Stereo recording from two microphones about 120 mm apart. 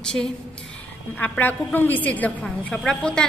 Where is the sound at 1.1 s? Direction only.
15° left (ahead or behind).